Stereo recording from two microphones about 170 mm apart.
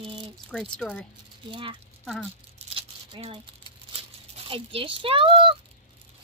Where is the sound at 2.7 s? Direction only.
35° right (ahead or behind).